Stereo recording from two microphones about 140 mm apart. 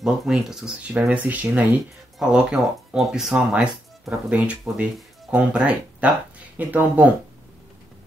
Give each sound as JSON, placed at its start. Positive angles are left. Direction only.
{"t": 0.0, "sound": "speech", "side_deg": -5}